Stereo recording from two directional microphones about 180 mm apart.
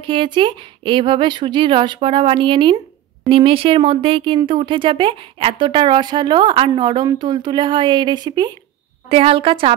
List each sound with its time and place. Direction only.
0.0 s a woman's voice: 30° right (ahead or behind)